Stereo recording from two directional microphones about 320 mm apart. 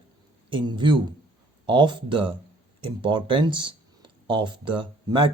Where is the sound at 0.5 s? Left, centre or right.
Centre.